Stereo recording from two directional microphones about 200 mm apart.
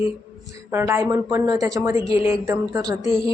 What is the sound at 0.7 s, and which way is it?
Speech, 15° right (ahead or behind).